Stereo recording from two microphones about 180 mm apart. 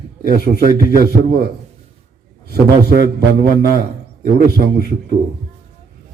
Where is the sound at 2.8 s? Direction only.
60° right (ahead or behind).